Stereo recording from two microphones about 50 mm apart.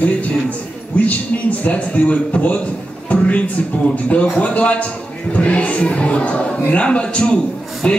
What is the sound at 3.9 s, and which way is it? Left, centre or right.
A man's voice, left.